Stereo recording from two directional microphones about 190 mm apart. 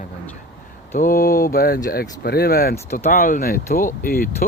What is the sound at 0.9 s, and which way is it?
Speech, 45° left (ahead or behind).